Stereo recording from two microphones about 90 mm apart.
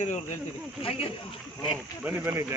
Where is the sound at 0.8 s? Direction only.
90° left.